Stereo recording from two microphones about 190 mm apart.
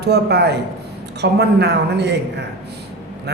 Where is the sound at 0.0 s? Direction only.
60° right (ahead or behind).